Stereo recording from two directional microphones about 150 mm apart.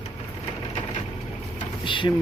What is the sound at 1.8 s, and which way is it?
Mechanisms, 35° left (ahead or behind).